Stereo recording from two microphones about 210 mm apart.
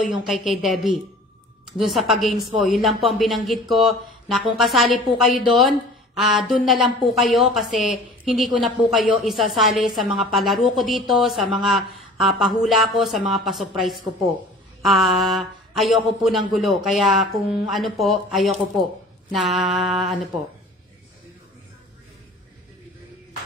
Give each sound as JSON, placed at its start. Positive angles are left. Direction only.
{"t": 0.0, "sound": "a woman's voice", "side_deg": 0}